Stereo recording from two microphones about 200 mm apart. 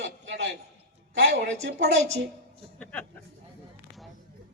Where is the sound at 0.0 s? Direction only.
65° right (ahead or behind).